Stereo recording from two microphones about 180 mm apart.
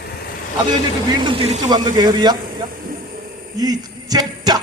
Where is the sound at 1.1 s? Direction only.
25° right (ahead or behind).